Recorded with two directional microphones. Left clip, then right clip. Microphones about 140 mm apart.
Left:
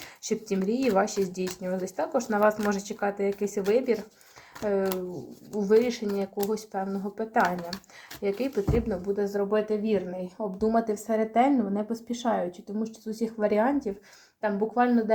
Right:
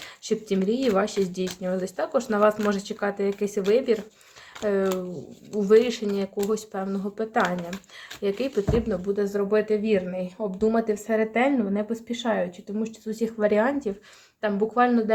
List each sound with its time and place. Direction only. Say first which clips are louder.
0.3 s speech: right 3 dB; 20° right (ahead or behind); by 15.1 s 35° right (ahead or behind)